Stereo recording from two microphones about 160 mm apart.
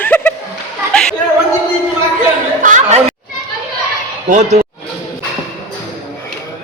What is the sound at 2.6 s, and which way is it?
Chatter, 50° right (ahead or behind).